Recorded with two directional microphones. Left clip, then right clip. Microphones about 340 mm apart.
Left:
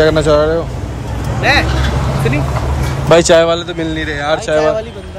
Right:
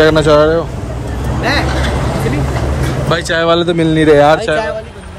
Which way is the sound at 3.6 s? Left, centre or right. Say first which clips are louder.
Right 9 dB; right.